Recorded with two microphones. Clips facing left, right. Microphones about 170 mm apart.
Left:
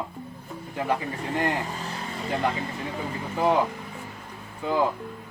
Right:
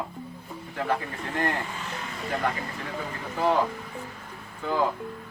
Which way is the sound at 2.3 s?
25° left (ahead or behind).